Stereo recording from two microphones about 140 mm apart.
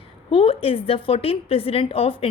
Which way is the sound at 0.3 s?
40° left (ahead or behind).